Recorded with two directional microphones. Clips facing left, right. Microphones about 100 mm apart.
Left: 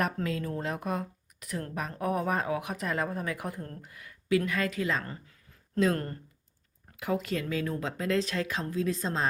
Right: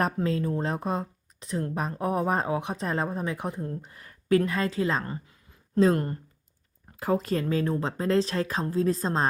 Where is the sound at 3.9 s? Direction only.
40° right (ahead or behind).